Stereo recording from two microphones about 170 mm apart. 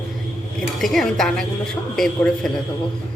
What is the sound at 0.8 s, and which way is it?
Speech, centre (ahead or behind).